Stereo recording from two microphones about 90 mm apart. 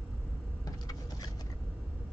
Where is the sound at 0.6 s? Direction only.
45° left (ahead or behind).